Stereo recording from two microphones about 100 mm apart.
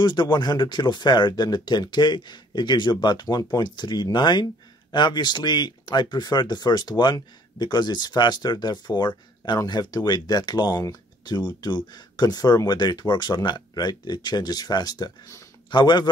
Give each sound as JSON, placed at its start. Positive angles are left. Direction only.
{"t": 0.0, "sound": "speech", "side_deg": 50}